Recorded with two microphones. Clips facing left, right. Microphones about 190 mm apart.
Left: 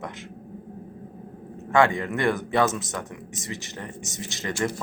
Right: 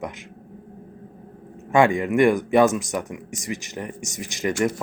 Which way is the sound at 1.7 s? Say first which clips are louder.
Right 3 dB; 15° right (ahead or behind).